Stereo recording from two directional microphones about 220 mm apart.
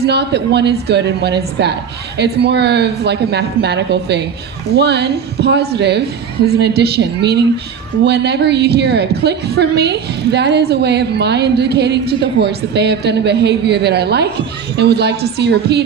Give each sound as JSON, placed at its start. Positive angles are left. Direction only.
{"t": 0.0, "sound": "a woman's voice", "side_deg": -50}